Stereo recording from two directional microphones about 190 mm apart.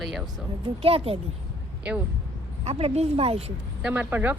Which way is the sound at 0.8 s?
30° right (ahead or behind).